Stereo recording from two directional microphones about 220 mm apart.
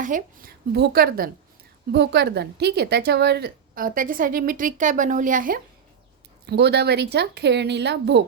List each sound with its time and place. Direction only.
0.0 s a woman's voice: 40° right (ahead or behind)
6.4 s speech: 50° right (ahead or behind)